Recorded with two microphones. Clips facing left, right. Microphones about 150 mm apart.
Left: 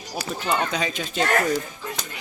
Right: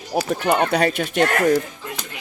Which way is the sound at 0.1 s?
60° right (ahead or behind).